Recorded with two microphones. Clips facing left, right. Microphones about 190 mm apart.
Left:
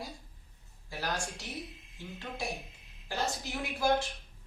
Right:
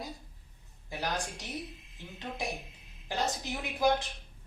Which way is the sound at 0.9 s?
20° right (ahead or behind).